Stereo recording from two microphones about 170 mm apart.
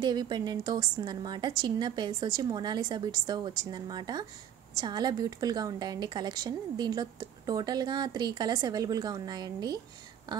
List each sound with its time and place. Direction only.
0.0 s a woman's voice: 25° right (ahead or behind)